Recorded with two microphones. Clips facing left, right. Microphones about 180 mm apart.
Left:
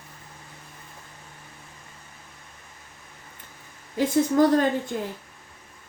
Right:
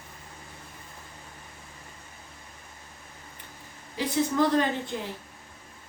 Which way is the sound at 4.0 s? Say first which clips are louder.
Left 5 dB; 45° left (ahead or behind).